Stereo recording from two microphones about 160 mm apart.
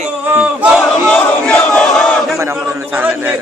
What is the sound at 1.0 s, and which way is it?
Battle cry, 10° left (ahead or behind).